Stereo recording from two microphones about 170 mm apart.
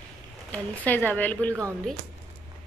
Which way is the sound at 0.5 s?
10° left (ahead or behind).